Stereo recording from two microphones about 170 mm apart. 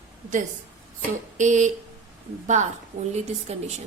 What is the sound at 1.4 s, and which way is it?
Speech, 45° right (ahead or behind).